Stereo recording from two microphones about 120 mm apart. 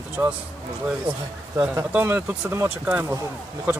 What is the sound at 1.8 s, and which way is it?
Speech, 20° right (ahead or behind).